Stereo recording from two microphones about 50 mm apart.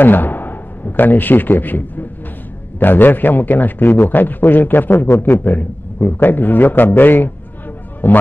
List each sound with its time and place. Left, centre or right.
0.0 s a man's voice: left
5.0 s a man's voice: left
5.4 s a man's voice: left